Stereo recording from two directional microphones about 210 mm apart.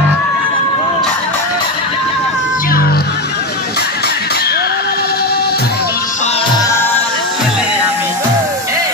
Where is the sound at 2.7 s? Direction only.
45° left (ahead or behind).